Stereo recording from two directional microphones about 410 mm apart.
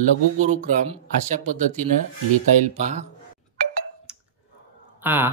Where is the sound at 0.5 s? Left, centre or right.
Centre.